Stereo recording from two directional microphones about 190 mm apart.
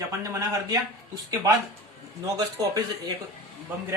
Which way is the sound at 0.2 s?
15° right (ahead or behind).